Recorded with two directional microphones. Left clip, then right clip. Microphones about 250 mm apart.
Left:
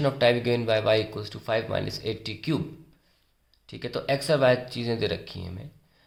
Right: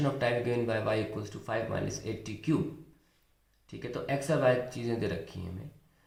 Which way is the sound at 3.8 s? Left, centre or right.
Left.